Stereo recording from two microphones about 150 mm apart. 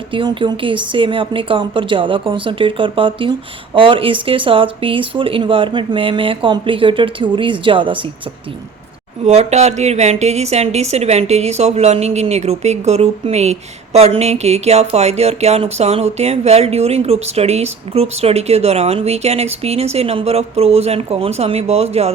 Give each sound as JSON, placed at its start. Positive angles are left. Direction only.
{"t": 0.1, "sound": "speech", "side_deg": -35}
{"t": 9.2, "sound": "a woman's voice", "side_deg": -45}